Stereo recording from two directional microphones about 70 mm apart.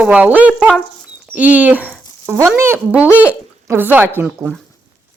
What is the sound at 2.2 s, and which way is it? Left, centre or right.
Speech, right.